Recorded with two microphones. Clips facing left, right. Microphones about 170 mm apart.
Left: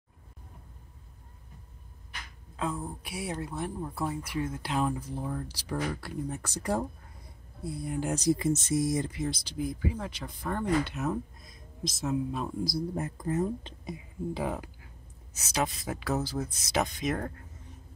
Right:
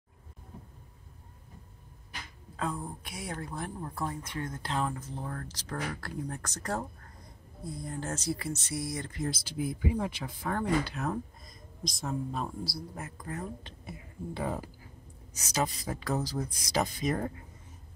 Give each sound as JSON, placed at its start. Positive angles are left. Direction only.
{"t": 2.5, "sound": "speech", "side_deg": 5}
{"t": 9.1, "sound": "speech", "side_deg": 0}
{"t": 12.6, "sound": "speech", "side_deg": 20}